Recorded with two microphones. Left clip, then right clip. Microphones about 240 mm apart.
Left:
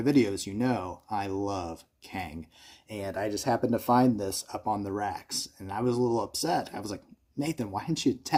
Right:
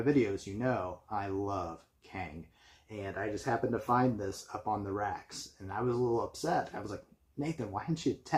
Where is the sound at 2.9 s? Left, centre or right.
Left.